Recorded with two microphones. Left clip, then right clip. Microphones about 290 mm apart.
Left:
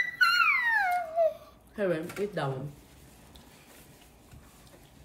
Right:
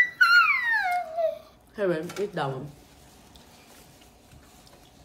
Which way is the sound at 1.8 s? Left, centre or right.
Centre.